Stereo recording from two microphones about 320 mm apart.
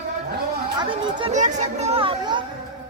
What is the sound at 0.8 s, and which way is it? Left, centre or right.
Speech, centre.